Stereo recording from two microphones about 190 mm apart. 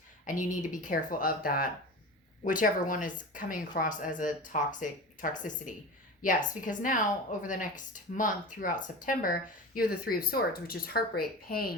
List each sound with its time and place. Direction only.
0.3 s speech: 45° left (ahead or behind)